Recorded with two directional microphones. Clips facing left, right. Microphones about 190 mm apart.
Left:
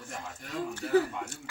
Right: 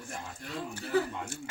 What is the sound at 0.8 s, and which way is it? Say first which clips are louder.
Speech: left 4 dB; 50° left (ahead or behind).